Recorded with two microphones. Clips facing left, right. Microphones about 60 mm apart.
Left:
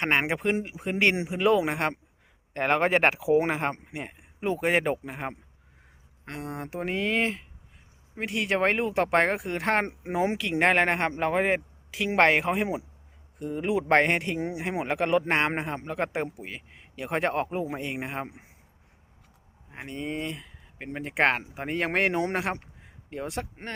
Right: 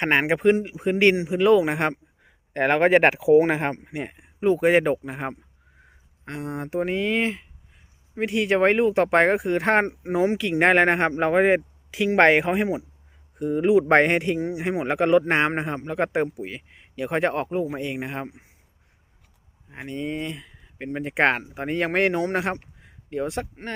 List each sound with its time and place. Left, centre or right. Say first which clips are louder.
0.0 s a man's voice: right 6 dB; centre
1.7 s a man's voice: right 4 dB; centre
9.8 s a man's voice: right 5 dB; centre
19.7 s a man's voice: right 4 dB; centre